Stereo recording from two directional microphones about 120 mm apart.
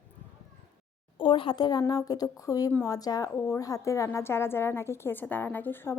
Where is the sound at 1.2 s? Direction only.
45° left (ahead or behind).